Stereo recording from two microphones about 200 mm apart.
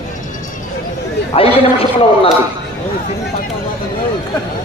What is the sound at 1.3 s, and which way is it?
Speech, 30° left (ahead or behind).